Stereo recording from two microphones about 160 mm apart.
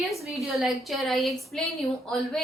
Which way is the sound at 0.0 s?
Centre (ahead or behind).